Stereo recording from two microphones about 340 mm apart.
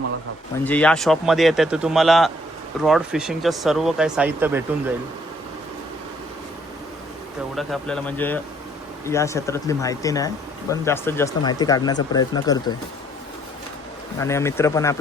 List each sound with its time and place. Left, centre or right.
0.6 s speech: centre
7.5 s speech: centre
14.2 s speech: centre